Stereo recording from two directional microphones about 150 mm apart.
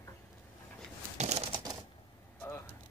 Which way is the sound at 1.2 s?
45° right (ahead or behind).